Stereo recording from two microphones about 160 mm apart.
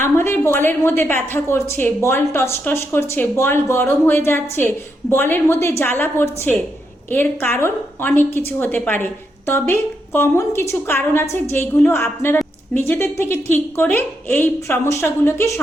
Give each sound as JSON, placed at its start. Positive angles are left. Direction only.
{"t": 0.0, "sound": "a woman's voice", "side_deg": 15}